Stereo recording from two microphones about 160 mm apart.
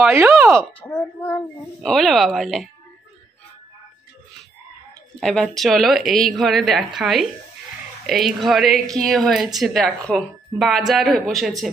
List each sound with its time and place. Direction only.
0.1 s speech: 20° right (ahead or behind)
0.7 s speech: 10° left (ahead or behind)
5.2 s speech: 5° left (ahead or behind)